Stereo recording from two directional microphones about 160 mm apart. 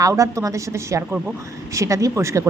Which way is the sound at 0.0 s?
20° right (ahead or behind).